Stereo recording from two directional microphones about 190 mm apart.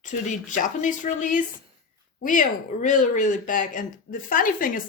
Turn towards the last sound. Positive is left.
turn(degrees=45)  # may be behind; listen again after turning